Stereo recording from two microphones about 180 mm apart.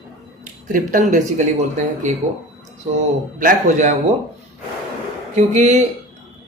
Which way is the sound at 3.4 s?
45° right (ahead or behind).